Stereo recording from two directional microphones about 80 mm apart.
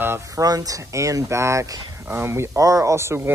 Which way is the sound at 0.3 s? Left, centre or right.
Right.